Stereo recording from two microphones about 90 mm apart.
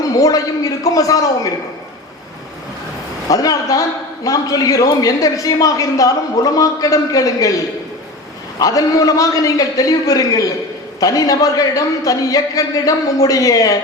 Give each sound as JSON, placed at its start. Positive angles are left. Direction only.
{"t": 0.2, "sound": "a man's voice", "side_deg": 40}
{"t": 3.2, "sound": "a man's voice", "side_deg": 40}
{"t": 8.5, "sound": "a man's voice", "side_deg": 45}